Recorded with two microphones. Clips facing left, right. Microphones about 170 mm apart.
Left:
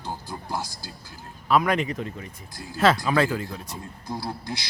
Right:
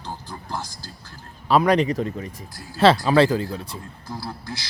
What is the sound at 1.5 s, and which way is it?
Speech, 35° right (ahead or behind).